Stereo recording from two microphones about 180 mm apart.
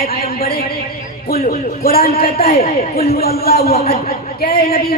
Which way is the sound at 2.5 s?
35° left (ahead or behind).